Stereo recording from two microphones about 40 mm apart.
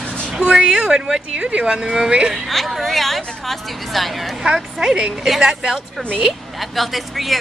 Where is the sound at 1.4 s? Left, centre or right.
Right.